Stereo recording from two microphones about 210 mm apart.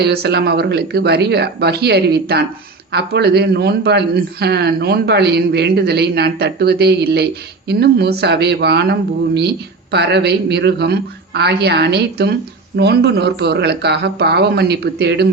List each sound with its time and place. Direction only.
0.0 s a man's voice: 50° right (ahead or behind)